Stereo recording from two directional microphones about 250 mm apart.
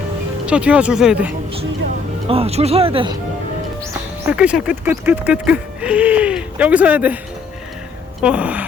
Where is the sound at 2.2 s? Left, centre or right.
Right.